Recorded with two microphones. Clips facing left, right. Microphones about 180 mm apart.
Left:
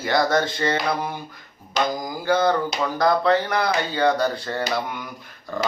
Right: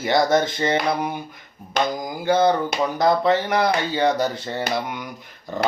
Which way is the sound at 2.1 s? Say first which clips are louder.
Right 3 dB; 20° right (ahead or behind).